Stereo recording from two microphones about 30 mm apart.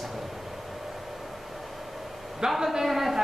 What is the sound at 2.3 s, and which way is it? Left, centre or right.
Speech, centre.